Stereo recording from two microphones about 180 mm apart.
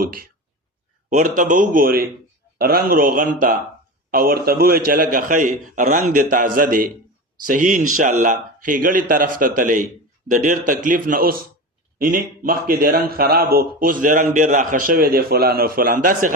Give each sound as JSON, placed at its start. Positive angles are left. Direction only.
{"t": 0.0, "sound": "a man's voice", "side_deg": -55}
{"t": 1.4, "sound": "a man's voice", "side_deg": -45}